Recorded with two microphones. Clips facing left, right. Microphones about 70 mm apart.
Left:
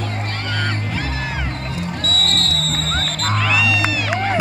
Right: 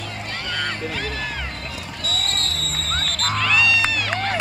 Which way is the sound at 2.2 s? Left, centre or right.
Centre.